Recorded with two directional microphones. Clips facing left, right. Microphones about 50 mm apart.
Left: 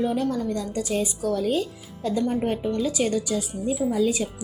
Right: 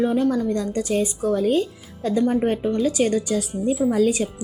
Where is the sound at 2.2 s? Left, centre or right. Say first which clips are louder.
Right 6 dB; right.